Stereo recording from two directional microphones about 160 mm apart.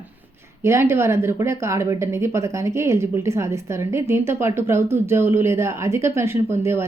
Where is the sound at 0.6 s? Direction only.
15° right (ahead or behind).